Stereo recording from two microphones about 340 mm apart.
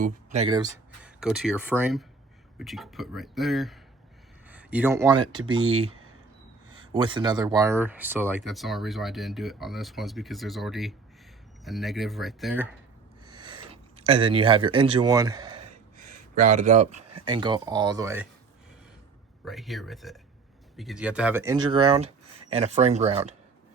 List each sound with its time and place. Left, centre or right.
0.0 s speech: centre
5.4 s speech: right
6.9 s speech: centre
14.0 s speech: centre
19.5 s speech: centre